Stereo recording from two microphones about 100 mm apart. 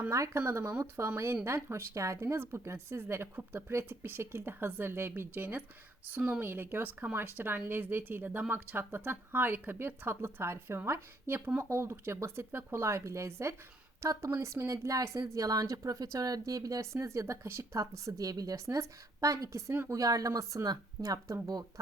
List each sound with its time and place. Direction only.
0.1 s a woman's voice: 30° right (ahead or behind)